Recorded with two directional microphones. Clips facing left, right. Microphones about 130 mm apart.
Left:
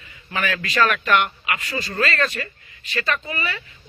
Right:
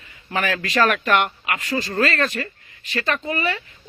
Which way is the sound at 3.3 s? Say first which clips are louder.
Right 5 dB; 45° right (ahead or behind).